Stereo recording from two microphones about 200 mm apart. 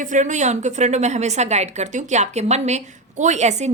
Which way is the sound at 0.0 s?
40° right (ahead or behind).